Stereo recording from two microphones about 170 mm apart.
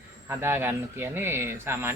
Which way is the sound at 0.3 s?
15° right (ahead or behind).